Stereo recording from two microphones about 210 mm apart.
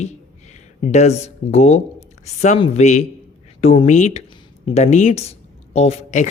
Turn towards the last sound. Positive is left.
turn(degrees=30)  # may be behind; listen again after turning